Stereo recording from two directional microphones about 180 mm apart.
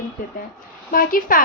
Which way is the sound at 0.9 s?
50° left (ahead or behind).